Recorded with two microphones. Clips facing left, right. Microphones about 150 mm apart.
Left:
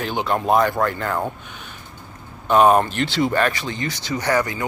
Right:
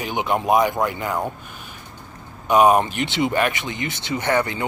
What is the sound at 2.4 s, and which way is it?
Speech, 10° right (ahead or behind).